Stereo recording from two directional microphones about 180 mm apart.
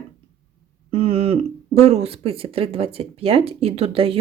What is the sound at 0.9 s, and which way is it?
Speech, 35° right (ahead or behind).